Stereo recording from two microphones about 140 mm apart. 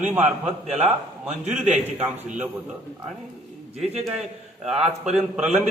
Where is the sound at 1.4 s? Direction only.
55° right (ahead or behind).